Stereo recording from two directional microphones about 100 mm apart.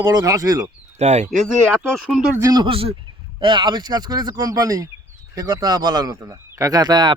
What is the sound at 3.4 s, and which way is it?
Speech, 50° right (ahead or behind).